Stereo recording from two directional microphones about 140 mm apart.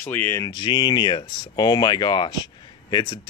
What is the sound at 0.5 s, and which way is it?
Speech, 30° left (ahead or behind).